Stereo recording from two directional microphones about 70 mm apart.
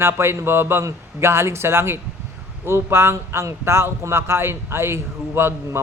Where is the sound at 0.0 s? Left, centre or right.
Right.